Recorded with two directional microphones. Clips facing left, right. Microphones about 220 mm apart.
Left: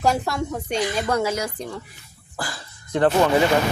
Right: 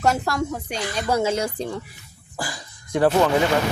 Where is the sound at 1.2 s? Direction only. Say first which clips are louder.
Right 2 dB; 30° right (ahead or behind).